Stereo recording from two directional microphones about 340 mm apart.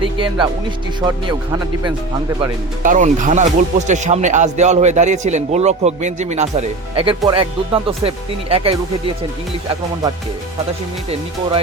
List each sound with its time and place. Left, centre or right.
0.0 s speech: centre
2.8 s speech: right